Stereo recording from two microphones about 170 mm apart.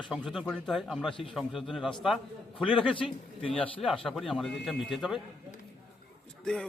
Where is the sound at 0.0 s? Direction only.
Centre (ahead or behind).